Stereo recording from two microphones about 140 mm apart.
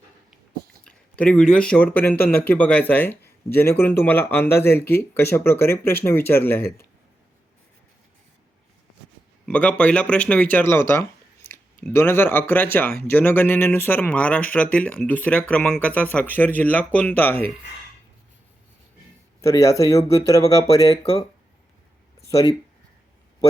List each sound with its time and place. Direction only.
0.9 s speech: 5° left (ahead or behind)
9.5 s speech: 10° left (ahead or behind)
19.4 s speech: 20° left (ahead or behind)
21.0 s speech: 40° left (ahead or behind)